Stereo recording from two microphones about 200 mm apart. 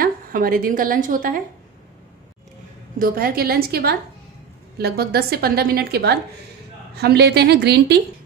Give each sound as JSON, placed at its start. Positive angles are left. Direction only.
{"t": 0.0, "sound": "a woman's voice", "side_deg": -45}
{"t": 3.0, "sound": "a woman's voice", "side_deg": -50}